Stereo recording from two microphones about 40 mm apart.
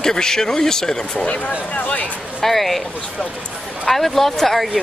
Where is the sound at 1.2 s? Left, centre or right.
Left.